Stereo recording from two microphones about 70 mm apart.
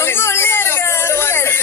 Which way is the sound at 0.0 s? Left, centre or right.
Left.